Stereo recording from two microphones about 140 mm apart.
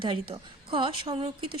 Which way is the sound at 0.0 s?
35° right (ahead or behind).